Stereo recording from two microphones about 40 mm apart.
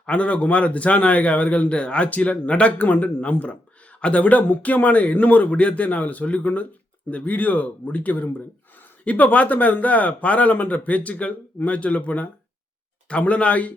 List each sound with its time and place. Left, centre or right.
0.0 s a man's voice: left